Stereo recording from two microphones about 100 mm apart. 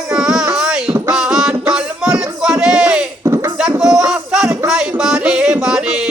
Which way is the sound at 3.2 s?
30° right (ahead or behind).